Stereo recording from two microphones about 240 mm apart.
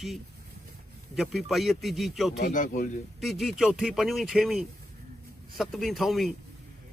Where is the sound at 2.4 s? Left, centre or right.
Left.